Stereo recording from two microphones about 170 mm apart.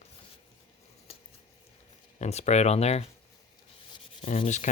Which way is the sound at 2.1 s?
40° left (ahead or behind).